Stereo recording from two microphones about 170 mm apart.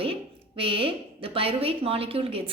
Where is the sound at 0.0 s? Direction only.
30° right (ahead or behind).